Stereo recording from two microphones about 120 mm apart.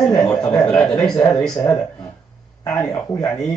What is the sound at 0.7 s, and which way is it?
Speech, 5° left (ahead or behind).